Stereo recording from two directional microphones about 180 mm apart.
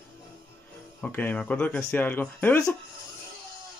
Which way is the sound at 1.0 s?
10° left (ahead or behind).